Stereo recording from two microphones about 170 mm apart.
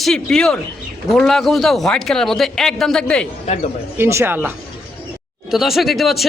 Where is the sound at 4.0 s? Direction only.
15° right (ahead or behind).